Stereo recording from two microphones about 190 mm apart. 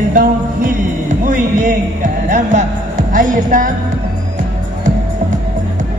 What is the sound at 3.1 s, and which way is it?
Music, 45° right (ahead or behind).